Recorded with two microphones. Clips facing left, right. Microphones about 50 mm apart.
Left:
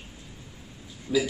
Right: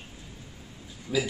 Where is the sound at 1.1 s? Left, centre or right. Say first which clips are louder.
Left 3 dB; centre.